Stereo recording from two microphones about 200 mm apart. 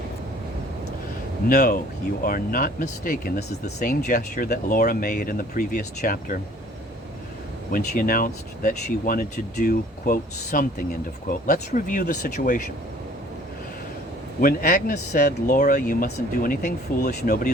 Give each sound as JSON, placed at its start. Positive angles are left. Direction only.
{"t": 1.5, "sound": "speech", "side_deg": 45}
{"t": 7.7, "sound": "speech", "side_deg": 45}
{"t": 14.4, "sound": "a man's voice", "side_deg": 40}